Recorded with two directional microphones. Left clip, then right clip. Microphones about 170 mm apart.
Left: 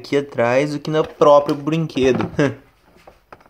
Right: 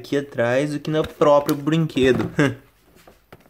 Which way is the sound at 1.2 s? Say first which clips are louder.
Left 4 dB; 15° right (ahead or behind).